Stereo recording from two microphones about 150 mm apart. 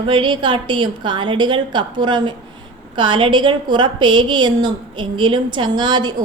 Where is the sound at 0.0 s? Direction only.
30° right (ahead or behind).